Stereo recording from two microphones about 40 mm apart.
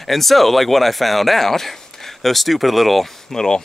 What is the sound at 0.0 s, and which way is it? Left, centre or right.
Speech, centre.